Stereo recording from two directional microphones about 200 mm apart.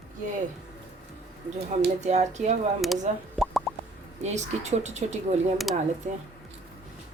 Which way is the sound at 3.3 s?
Centre (ahead or behind).